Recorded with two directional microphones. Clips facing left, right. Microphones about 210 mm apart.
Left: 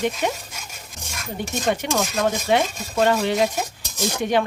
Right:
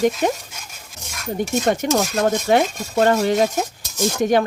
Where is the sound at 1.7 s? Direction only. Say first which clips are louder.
Right 2 dB; 40° right (ahead or behind).